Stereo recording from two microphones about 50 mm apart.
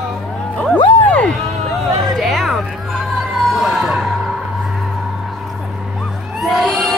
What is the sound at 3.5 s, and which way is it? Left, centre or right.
Music, centre.